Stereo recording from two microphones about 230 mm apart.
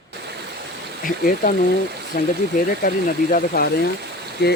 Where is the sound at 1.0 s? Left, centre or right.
Left.